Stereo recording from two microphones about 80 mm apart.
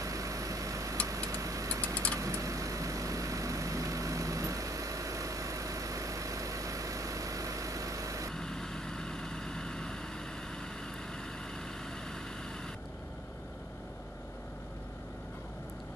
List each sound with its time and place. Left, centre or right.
0.0 s a sound: right
1.0 s vehicle: right
8.4 s vehicle: centre